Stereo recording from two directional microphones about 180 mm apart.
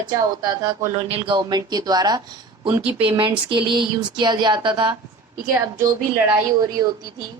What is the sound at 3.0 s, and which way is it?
A woman's voice, 25° right (ahead or behind).